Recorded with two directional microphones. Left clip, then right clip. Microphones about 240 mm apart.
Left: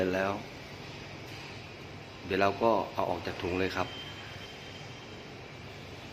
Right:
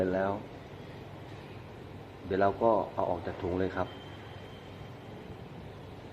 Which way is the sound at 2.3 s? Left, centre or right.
Left.